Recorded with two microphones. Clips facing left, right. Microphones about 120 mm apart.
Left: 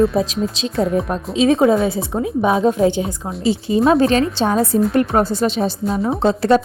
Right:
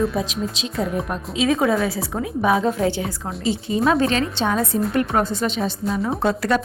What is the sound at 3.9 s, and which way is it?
A woman's voice, 35° left (ahead or behind).